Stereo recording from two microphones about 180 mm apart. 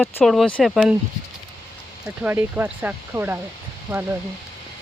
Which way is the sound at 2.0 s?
10° right (ahead or behind).